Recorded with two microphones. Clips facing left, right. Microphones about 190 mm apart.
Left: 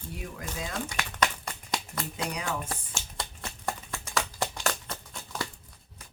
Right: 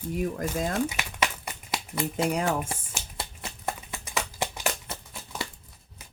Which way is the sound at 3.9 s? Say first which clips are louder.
Left 1 dB; 15° right (ahead or behind).